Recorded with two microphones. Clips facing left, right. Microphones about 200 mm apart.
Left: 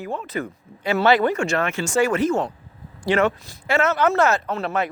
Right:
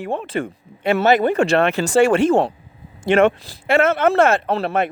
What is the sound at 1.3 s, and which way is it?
Speech, 30° right (ahead or behind).